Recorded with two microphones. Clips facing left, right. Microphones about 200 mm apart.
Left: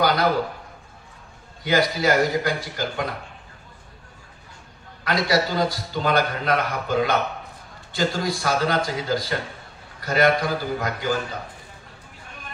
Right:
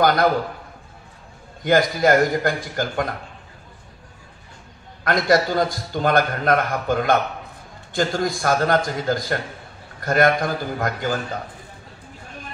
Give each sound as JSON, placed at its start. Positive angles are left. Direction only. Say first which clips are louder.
{"t": 0.0, "sound": "a sound", "louder": "right 3 dB", "side_deg": -50}
{"t": 1.6, "sound": "a man's voice", "louder": "right 4 dB", "side_deg": -50}
{"t": 5.0, "sound": "a man's voice", "louder": "right 4 dB", "side_deg": -50}